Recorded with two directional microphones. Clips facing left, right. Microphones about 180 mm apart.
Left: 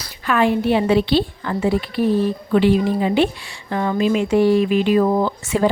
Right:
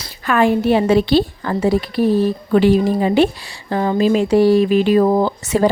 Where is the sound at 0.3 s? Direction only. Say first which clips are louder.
Right 3 dB; 45° right (ahead or behind).